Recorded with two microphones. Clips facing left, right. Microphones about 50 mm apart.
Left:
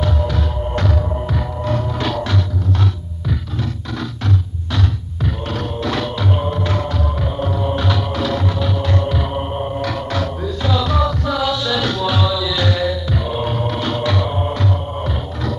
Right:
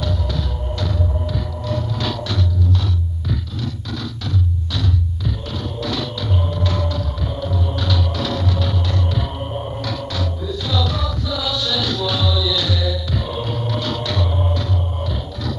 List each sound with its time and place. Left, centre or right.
0.0 s throbbing: left
4.7 s music: left
13.2 s music: left